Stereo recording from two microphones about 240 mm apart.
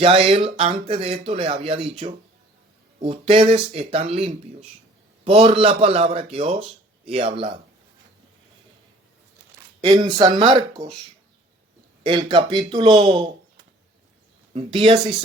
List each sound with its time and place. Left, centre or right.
0.0 s speech: right
9.8 s speech: centre
12.0 s speech: centre
14.5 s speech: right